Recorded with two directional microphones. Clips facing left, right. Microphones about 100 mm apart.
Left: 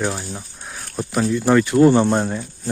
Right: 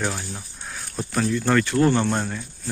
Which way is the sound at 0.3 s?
10° left (ahead or behind).